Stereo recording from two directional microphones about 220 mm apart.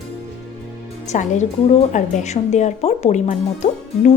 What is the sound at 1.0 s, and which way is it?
A woman's voice, 30° left (ahead or behind).